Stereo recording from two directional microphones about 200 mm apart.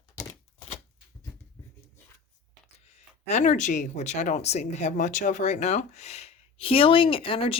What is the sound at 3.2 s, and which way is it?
A woman's voice, 35° left (ahead or behind).